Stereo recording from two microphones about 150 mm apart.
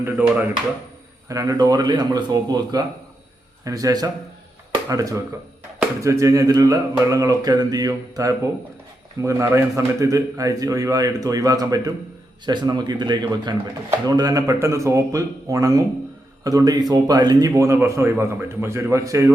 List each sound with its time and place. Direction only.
0.0 s speech: 10° right (ahead or behind)
1.3 s a man's voice: 20° right (ahead or behind)